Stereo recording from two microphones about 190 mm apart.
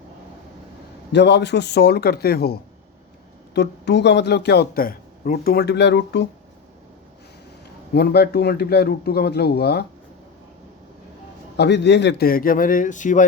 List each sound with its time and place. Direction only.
1.1 s a man's voice: 65° left (ahead or behind)
7.9 s a man's voice: 60° left (ahead or behind)
11.5 s a man's voice: 65° left (ahead or behind); by 13.2 s 40° left (ahead or behind)